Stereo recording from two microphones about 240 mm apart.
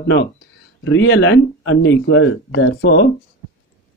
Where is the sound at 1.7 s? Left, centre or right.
Left.